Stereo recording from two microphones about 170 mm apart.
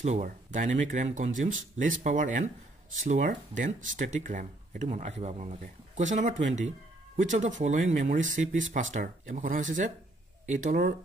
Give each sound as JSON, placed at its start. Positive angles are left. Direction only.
{"t": 0.0, "sound": "speech", "side_deg": -45}